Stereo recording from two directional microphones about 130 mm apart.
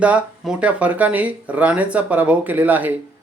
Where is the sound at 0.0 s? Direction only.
10° right (ahead or behind).